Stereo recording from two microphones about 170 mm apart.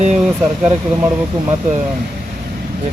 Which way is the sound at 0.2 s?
5° right (ahead or behind).